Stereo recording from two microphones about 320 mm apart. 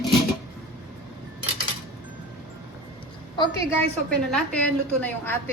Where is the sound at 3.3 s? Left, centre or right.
Centre.